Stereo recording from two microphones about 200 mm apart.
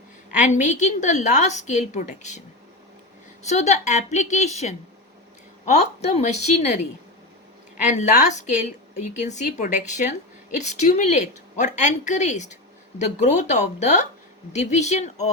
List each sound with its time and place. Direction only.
0.3 s a woman's voice: 40° left (ahead or behind)
3.4 s a woman's voice: 35° left (ahead or behind)
7.9 s a woman's voice: 35° left (ahead or behind)